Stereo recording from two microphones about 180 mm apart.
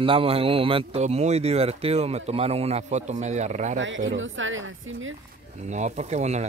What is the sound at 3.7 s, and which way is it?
Speech, 90° right.